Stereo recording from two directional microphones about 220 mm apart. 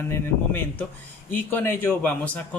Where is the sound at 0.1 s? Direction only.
10° left (ahead or behind).